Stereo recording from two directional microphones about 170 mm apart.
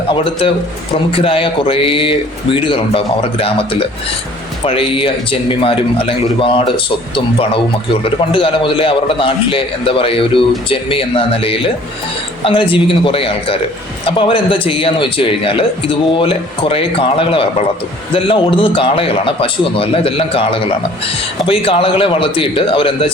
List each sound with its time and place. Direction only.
0.1 s a man's voice: 30° left (ahead or behind)
8.3 s a man's voice: 30° left (ahead or behind)